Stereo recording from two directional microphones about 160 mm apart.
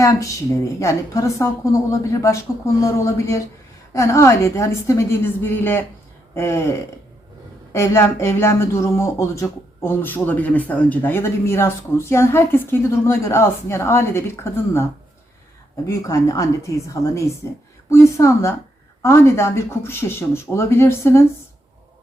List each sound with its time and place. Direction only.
0.0 s a woman's voice: 20° left (ahead or behind)
7.7 s speech: 15° left (ahead or behind)
15.9 s a woman's voice: 20° left (ahead or behind)